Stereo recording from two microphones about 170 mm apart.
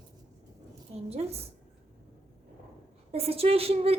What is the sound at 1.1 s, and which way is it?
Speech, 35° right (ahead or behind).